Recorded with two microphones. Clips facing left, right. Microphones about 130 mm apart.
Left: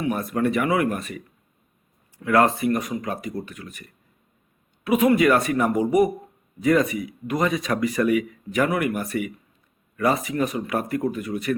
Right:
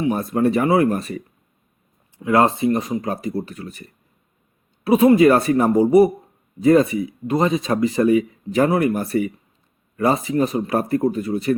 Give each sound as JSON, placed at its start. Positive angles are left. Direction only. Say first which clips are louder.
{"t": 0.0, "sound": "speech", "louder": "right 4 dB", "side_deg": -30}
{"t": 2.1, "sound": "speech", "louder": "right 2 dB", "side_deg": -20}